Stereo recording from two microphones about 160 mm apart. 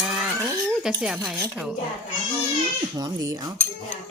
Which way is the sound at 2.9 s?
25° right (ahead or behind).